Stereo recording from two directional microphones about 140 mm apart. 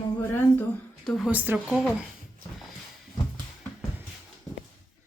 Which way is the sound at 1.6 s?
Centre (ahead or behind).